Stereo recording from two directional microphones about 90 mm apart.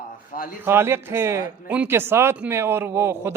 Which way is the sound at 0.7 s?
25° right (ahead or behind).